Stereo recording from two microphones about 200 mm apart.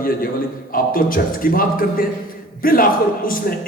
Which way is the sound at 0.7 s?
45° left (ahead or behind).